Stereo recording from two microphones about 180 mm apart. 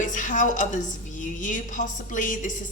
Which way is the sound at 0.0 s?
45° left (ahead or behind).